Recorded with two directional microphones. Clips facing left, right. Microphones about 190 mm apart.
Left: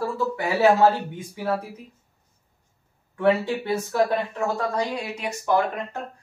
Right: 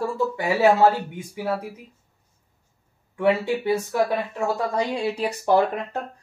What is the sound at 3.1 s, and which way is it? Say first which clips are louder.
Speech: even; 10° right (ahead or behind).